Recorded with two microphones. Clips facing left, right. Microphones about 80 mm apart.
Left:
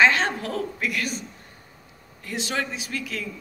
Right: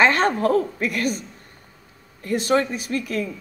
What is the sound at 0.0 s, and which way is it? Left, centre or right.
A woman's voice, right.